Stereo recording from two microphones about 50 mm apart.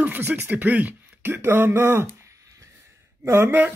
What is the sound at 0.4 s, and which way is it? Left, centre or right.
Speech, right.